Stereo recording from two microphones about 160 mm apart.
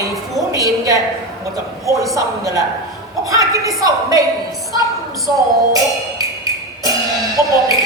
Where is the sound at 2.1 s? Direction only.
20° right (ahead or behind).